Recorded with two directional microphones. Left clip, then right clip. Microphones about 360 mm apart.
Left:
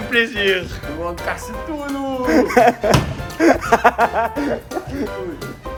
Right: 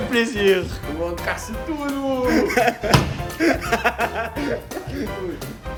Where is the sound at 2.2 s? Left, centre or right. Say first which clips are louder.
Left 6 dB; centre.